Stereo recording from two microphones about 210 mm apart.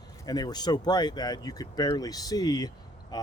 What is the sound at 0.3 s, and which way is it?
Speech, 20° left (ahead or behind).